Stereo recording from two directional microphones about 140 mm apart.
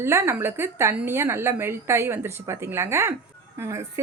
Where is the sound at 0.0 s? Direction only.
20° right (ahead or behind).